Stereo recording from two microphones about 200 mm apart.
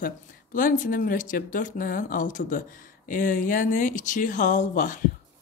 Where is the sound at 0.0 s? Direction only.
45° left (ahead or behind).